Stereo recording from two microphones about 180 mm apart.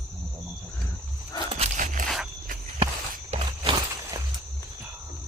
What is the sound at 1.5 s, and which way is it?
Biting, 40° right (ahead or behind).